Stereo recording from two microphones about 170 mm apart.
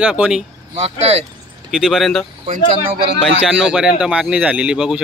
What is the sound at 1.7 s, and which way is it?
Speech, centre (ahead or behind).